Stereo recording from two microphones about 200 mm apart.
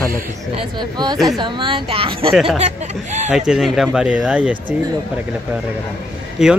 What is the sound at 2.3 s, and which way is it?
Speech, centre (ahead or behind).